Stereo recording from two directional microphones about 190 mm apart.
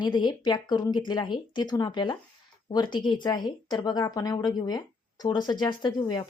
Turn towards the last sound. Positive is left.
turn(degrees=20)  # may be behind; listen again after turning